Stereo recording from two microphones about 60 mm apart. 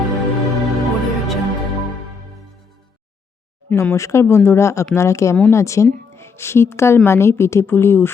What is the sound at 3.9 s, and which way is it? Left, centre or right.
A woman's voice, left.